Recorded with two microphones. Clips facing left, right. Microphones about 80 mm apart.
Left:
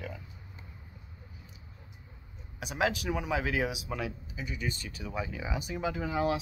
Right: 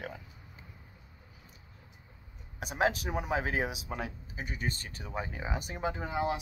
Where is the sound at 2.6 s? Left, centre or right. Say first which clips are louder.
Right 1 dB; right.